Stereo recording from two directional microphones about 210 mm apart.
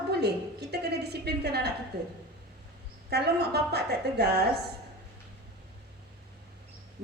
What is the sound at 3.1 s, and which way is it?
A woman's voice, 50° right (ahead or behind).